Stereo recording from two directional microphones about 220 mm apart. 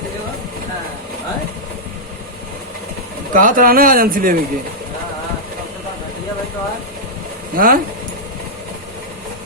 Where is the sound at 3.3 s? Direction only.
40° right (ahead or behind).